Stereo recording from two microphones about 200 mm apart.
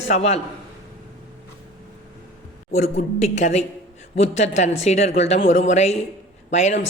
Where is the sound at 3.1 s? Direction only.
35° left (ahead or behind).